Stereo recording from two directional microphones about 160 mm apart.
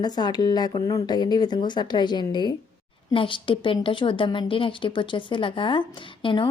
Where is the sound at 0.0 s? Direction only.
25° left (ahead or behind).